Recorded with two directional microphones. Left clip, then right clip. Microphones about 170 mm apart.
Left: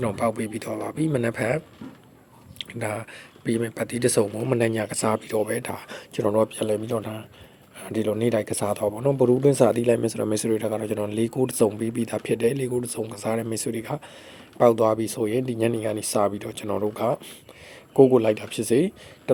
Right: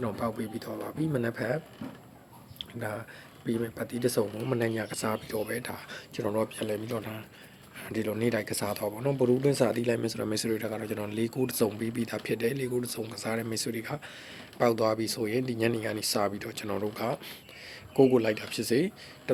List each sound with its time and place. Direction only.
0.0 s speech: 40° left (ahead or behind)